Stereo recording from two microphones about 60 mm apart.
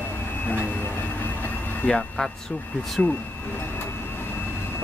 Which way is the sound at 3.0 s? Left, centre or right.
Centre.